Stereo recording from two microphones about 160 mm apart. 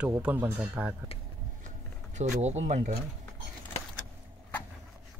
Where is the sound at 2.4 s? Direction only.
45° right (ahead or behind).